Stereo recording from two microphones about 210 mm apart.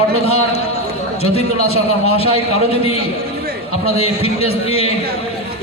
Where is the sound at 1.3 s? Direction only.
30° left (ahead or behind).